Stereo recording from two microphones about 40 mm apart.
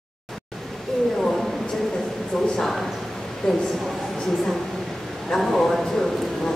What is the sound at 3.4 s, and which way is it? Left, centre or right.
Speech, left.